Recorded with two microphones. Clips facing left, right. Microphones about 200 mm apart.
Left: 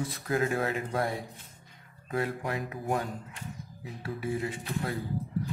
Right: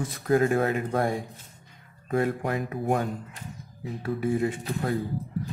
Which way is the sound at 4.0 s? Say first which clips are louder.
Right 7 dB; 50° right (ahead or behind).